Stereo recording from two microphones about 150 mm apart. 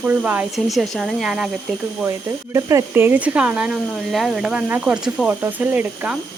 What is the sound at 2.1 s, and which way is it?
Speech, 20° right (ahead or behind).